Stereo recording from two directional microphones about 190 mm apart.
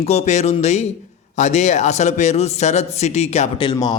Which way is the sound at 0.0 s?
35° left (ahead or behind).